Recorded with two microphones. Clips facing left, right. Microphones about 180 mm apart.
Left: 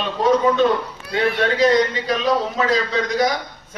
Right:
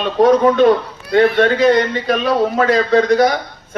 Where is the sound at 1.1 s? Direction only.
55° right (ahead or behind).